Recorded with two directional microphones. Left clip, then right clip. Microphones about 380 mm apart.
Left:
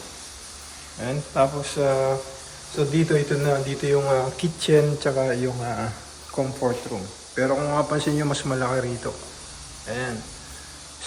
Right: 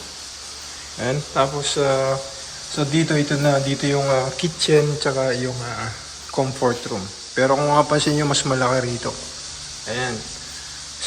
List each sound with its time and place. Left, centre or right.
0.9 s speech: centre